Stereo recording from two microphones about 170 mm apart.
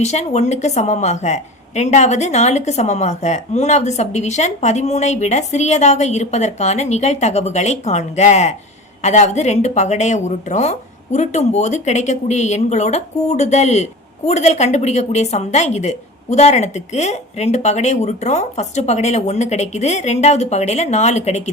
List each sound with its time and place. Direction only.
0.0 s a woman's voice: 40° left (ahead or behind)